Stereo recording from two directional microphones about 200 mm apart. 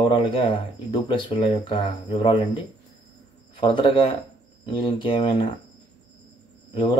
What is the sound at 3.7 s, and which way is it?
Speech, 25° left (ahead or behind).